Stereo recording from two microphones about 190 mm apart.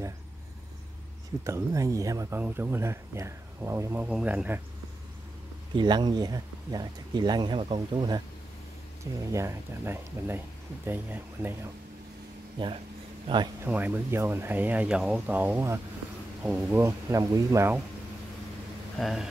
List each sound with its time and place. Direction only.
1.4 s speech: 15° right (ahead or behind)
5.8 s speech: 25° right (ahead or behind)
9.2 s speech: 15° right (ahead or behind)
12.6 s speech: 25° right (ahead or behind)
13.7 s speech: 10° right (ahead or behind)
18.9 s speech: centre (ahead or behind)